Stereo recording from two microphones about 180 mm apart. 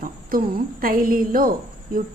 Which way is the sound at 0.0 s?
55° right (ahead or behind).